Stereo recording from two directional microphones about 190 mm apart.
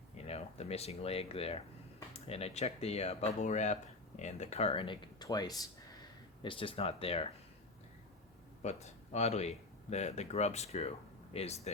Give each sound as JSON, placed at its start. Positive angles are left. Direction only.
{"t": 0.2, "sound": "speech", "side_deg": 35}
{"t": 8.6, "sound": "speech", "side_deg": 35}